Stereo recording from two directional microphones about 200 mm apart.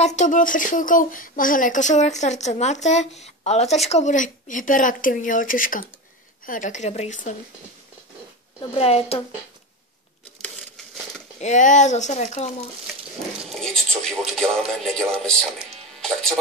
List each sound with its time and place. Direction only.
0.0 s speech: 35° left (ahead or behind)
8.5 s a woman's voice: 30° left (ahead or behind)
11.3 s speech: 35° left (ahead or behind)
13.6 s speech: centre (ahead or behind)